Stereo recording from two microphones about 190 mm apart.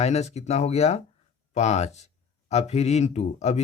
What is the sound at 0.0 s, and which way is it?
Speech, 35° left (ahead or behind).